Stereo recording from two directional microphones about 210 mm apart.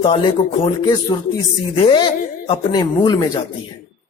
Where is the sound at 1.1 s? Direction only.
20° left (ahead or behind).